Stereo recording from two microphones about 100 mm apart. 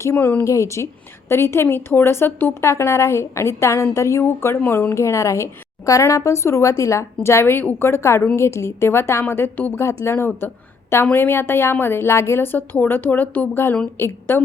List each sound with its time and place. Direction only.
0.0 s a woman's voice: 25° left (ahead or behind)